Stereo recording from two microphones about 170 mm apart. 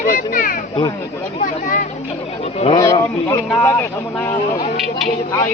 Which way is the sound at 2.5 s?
35° left (ahead or behind).